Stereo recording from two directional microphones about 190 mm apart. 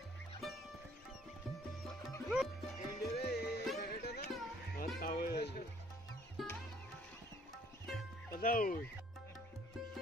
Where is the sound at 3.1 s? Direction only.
55° left (ahead or behind).